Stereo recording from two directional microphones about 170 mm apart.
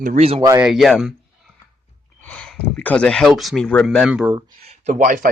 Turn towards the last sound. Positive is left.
turn(degrees=-50)  # may be behind; listen again after turning